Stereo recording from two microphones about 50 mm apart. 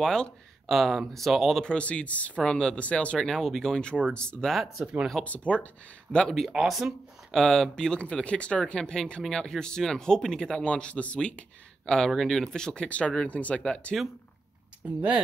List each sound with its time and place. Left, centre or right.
0.0 s speech: centre
0.7 s speech: centre
1.6 s speech: left
3.2 s speech: centre
4.5 s speech: centre
5.2 s speech: left
6.7 s a sound: centre
7.3 s speech: centre
15.0 s speech: right